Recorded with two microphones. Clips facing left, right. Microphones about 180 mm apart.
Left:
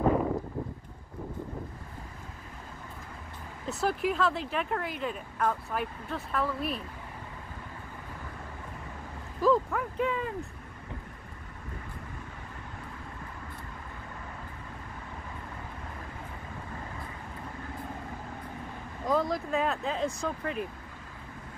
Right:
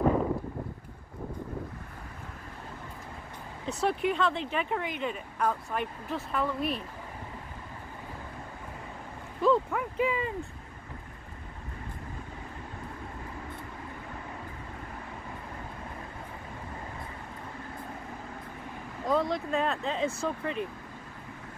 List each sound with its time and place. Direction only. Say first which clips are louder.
3.6 s speech: right 1 dB; centre (ahead or behind)
9.4 s a sound: even; centre (ahead or behind)
19.0 s speech: even; centre (ahead or behind)